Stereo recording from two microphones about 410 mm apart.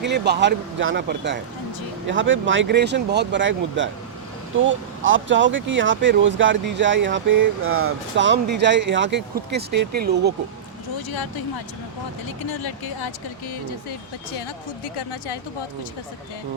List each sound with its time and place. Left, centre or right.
0.0 s speech: right
12.5 s speech: left